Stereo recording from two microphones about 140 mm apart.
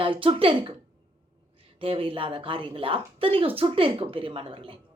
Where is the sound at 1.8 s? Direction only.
40° right (ahead or behind).